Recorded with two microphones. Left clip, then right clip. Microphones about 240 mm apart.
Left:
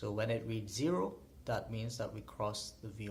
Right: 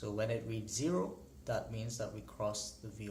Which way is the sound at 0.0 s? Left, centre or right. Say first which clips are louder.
Even; left.